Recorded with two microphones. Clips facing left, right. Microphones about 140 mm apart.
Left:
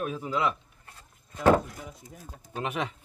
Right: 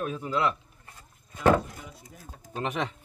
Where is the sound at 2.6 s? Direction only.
5° left (ahead or behind).